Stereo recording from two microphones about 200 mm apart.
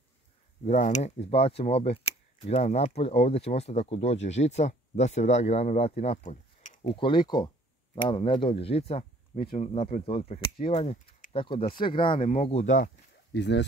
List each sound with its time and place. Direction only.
0.7 s speech: 35° left (ahead or behind)
13.3 s speech: 60° left (ahead or behind)